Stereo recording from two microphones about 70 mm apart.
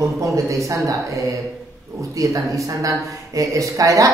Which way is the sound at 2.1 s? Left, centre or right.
Right.